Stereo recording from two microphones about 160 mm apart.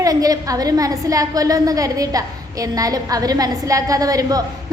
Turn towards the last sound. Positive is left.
turn(degrees=-25)  # may be behind; listen again after turning